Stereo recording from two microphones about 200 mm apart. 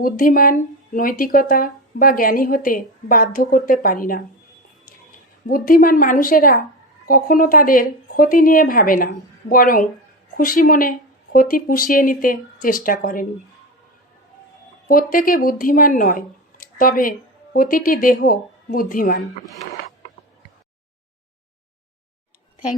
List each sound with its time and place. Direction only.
0.0 s speech: 45° left (ahead or behind)
5.5 s speech: 45° left (ahead or behind)
14.8 s speech: 45° left (ahead or behind)